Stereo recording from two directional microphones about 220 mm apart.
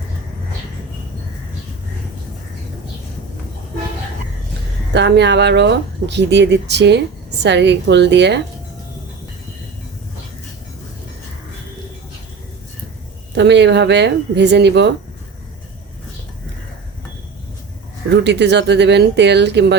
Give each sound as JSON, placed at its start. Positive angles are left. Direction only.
{"t": 4.9, "sound": "speech", "side_deg": -50}
{"t": 13.3, "sound": "speech", "side_deg": -50}
{"t": 18.1, "sound": "speech", "side_deg": -50}